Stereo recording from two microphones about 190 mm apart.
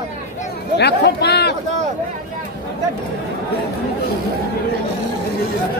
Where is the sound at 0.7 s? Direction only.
60° left (ahead or behind).